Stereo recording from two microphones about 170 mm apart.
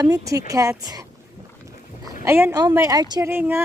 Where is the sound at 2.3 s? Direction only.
15° right (ahead or behind).